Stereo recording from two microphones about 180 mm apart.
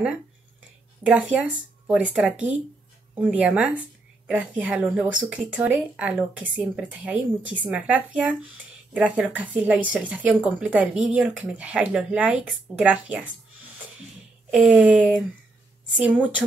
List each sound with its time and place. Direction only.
1.0 s speech: 5° right (ahead or behind)
14.5 s speech: 5° right (ahead or behind)